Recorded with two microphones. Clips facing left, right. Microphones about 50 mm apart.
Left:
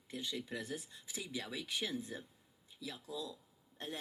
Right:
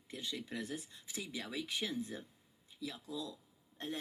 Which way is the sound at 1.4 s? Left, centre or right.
Centre.